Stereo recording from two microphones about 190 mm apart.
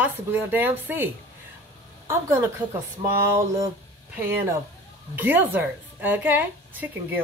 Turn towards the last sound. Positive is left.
turn(degrees=-10)  # may be behind; listen again after turning